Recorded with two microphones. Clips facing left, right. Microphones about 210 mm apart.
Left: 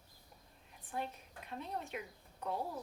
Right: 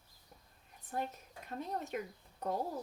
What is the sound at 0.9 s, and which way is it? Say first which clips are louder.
Speech: right 2 dB; 40° right (ahead or behind).